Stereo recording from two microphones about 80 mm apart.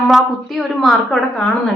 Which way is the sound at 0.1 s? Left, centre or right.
Centre.